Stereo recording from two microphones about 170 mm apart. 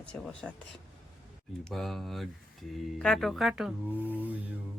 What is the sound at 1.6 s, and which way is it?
Speech, 5° left (ahead or behind).